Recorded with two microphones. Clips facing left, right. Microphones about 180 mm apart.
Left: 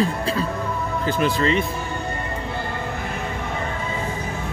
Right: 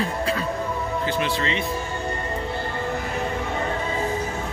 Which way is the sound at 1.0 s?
45° left (ahead or behind).